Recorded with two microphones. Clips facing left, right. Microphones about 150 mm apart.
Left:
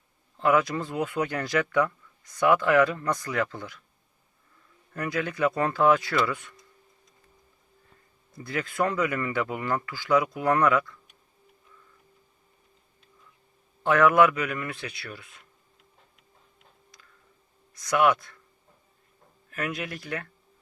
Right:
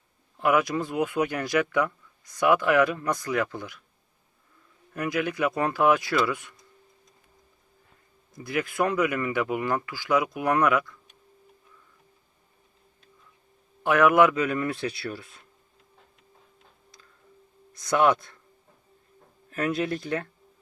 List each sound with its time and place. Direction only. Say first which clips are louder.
0.3 s speech: even; 15° right (ahead or behind)
4.9 s speech: right 1 dB; 15° right (ahead or behind)
8.4 s speech: right 1 dB; 15° right (ahead or behind)
13.8 s speech: right 1 dB; 15° right (ahead or behind); by 15.4 s 35° right (ahead or behind)
17.7 s speech: right 1 dB; 25° right (ahead or behind)
19.5 s speech: right 6 dB; 30° right (ahead or behind)